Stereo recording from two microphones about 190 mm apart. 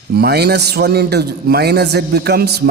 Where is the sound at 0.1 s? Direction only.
55° right (ahead or behind).